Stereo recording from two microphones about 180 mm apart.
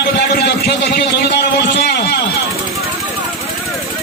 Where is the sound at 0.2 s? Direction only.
65° left (ahead or behind).